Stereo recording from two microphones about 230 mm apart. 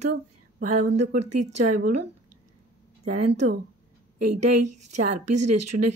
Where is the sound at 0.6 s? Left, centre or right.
Right.